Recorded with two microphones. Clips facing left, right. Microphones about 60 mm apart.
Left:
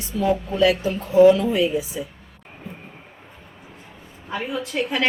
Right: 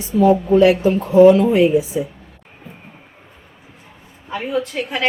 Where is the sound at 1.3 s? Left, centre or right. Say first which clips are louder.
Right 7 dB; right.